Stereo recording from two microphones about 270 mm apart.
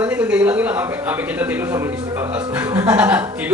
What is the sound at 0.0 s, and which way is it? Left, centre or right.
A man's voice, centre.